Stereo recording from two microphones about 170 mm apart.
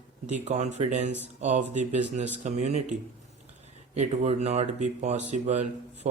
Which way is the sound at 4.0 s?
40° right (ahead or behind).